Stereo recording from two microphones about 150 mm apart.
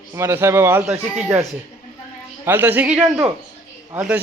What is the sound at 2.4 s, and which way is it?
Speech, 15° right (ahead or behind).